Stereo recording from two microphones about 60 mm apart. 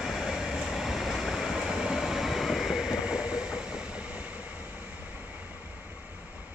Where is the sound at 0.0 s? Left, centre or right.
Centre.